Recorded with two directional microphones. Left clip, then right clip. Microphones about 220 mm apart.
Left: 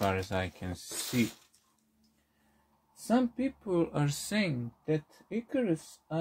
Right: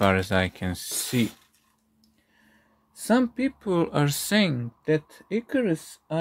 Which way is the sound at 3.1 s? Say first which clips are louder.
Right 6 dB; 50° right (ahead or behind).